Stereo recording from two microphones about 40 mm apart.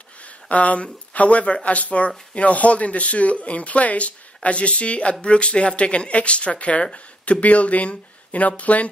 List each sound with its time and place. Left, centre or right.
0.5 s speech: left